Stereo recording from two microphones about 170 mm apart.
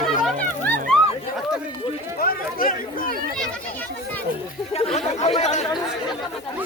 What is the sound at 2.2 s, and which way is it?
Chatter, 55° left (ahead or behind).